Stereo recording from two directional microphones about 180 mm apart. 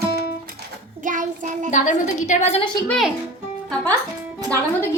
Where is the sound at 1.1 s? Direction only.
45° right (ahead or behind).